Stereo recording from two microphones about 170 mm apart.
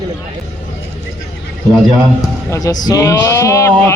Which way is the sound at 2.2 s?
20° left (ahead or behind).